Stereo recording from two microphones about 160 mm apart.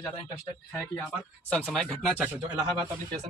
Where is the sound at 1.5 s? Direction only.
5° left (ahead or behind).